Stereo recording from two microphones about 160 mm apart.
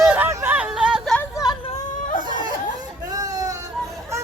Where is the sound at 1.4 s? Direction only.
20° left (ahead or behind).